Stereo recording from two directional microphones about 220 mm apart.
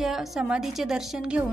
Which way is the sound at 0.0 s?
Centre (ahead or behind).